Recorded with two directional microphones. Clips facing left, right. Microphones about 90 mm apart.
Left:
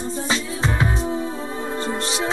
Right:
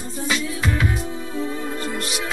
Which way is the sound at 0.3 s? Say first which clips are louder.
Right 1 dB; 30° left (ahead or behind).